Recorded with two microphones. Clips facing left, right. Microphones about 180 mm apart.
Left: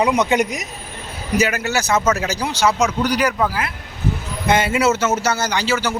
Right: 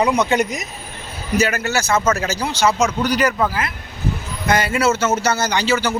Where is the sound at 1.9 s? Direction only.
Centre (ahead or behind).